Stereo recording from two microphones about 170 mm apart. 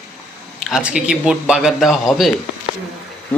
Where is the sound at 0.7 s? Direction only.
5° right (ahead or behind).